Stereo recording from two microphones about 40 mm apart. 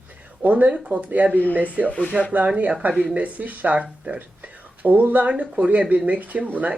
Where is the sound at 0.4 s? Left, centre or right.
Right.